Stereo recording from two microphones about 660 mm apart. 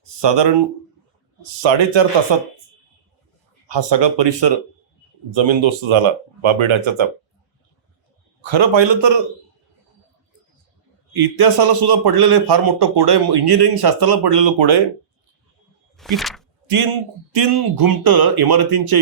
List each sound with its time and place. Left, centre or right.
0.2 s speech: right
1.6 s a man's voice: right
3.7 s a man's voice: right
8.4 s a man's voice: right
11.1 s a man's voice: right
16.0 s a sound: centre
16.6 s a man's voice: right
17.3 s a man's voice: right